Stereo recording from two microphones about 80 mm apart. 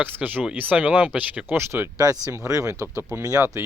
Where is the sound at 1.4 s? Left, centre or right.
Right.